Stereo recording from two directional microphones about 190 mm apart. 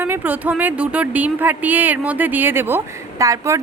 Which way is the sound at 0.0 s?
10° right (ahead or behind).